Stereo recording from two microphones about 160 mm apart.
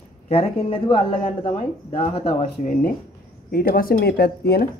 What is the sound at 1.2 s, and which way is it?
Speech, 45° left (ahead or behind).